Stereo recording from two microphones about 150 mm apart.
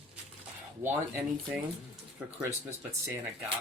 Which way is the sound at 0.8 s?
15° right (ahead or behind).